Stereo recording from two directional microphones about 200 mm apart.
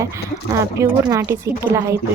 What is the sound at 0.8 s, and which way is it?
Speech, 15° right (ahead or behind).